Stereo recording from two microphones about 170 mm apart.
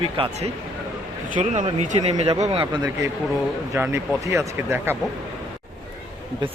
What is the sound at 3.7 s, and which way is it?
Speech, 15° right (ahead or behind).